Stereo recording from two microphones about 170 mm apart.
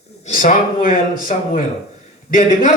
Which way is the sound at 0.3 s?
55° left (ahead or behind).